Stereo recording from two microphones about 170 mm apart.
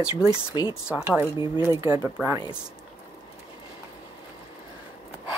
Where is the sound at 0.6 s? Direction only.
25° left (ahead or behind).